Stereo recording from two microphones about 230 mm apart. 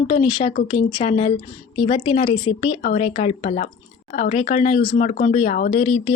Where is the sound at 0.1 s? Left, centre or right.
Left.